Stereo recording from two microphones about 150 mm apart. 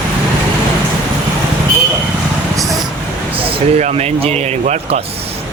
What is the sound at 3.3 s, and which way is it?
Speech, 40° right (ahead or behind).